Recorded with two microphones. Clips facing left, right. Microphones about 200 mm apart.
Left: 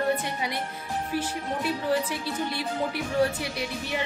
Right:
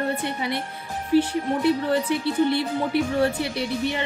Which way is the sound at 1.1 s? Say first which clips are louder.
Right 12 dB; 65° right (ahead or behind).